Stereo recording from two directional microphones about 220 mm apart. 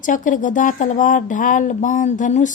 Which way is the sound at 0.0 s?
35° left (ahead or behind).